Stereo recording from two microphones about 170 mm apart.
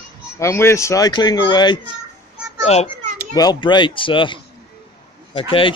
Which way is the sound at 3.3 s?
25° left (ahead or behind).